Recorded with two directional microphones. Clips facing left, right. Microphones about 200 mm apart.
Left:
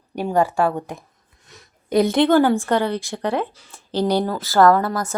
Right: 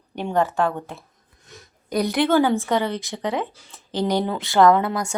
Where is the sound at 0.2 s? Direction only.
10° left (ahead or behind).